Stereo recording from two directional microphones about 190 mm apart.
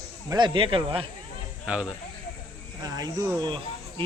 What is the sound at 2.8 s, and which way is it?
Speech, 20° right (ahead or behind).